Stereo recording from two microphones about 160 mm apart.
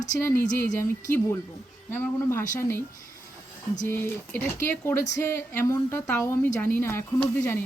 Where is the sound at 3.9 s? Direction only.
15° left (ahead or behind).